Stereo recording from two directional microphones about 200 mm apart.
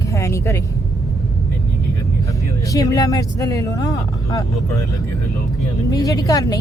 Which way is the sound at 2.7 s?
15° left (ahead or behind).